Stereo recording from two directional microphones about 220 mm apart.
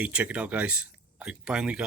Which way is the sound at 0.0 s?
5° right (ahead or behind).